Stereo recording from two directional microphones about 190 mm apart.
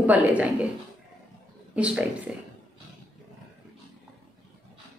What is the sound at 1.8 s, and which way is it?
Speech, 5° right (ahead or behind).